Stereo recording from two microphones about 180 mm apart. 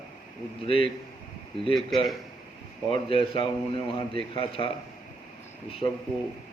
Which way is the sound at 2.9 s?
30° left (ahead or behind).